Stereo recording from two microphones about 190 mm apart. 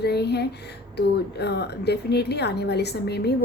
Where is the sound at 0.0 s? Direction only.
60° left (ahead or behind).